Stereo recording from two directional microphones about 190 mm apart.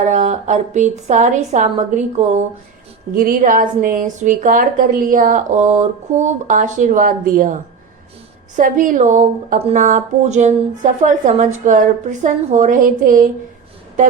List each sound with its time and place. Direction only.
0.0 s a woman's voice: 40° right (ahead or behind)